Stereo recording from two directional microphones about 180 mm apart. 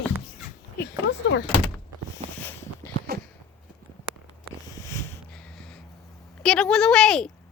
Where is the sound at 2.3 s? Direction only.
10° left (ahead or behind).